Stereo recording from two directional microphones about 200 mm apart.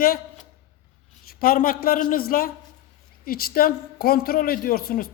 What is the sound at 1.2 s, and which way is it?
Speech, 45° left (ahead or behind).